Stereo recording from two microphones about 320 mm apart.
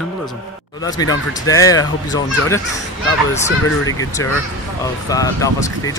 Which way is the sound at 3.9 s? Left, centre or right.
Centre.